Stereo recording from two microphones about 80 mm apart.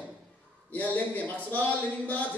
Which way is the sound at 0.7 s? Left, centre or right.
Left.